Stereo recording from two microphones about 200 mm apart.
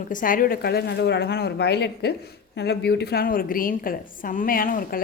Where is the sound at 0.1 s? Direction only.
40° left (ahead or behind).